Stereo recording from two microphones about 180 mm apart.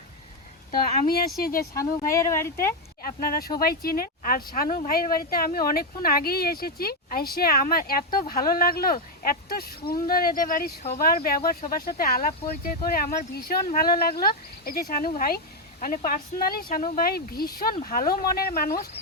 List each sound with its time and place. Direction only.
0.7 s speech: 55° left (ahead or behind)
1.7 s speech: 15° left (ahead or behind)
3.0 s speech: 55° left (ahead or behind)